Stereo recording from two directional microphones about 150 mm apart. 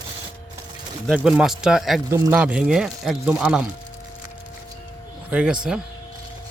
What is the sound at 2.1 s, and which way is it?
Speech, 20° right (ahead or behind).